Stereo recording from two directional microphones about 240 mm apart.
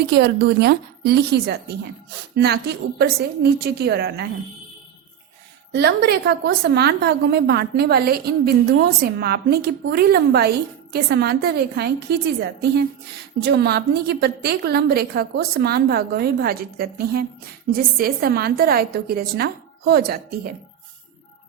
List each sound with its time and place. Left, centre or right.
0.1 s a woman's voice: right
5.7 s a woman's voice: right